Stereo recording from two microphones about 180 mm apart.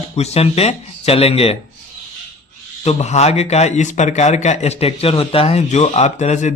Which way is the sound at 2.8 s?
35° left (ahead or behind).